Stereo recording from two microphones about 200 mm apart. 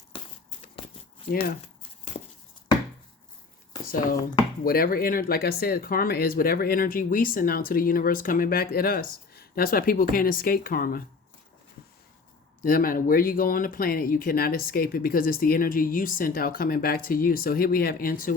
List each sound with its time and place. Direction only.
1.3 s speech: 50° left (ahead or behind)
4.6 s speech: 45° left (ahead or behind)
12.6 s speech: 45° left (ahead or behind)